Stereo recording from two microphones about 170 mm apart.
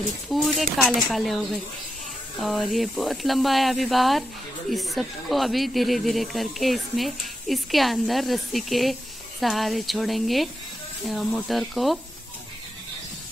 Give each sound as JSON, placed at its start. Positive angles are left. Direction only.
{"t": 0.3, "sound": "speech", "side_deg": 0}